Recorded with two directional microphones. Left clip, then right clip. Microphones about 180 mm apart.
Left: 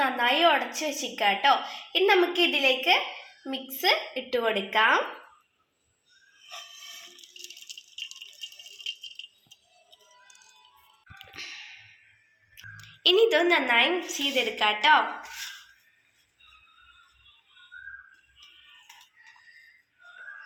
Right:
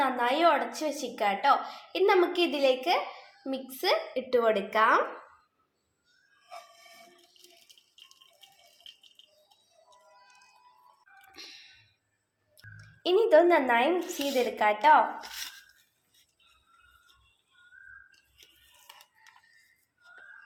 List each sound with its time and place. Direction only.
0.0 s a woman's voice: 5° right (ahead or behind)
7.4 s rattle: 20° right (ahead or behind)
12.7 s a woman's voice: 55° right (ahead or behind)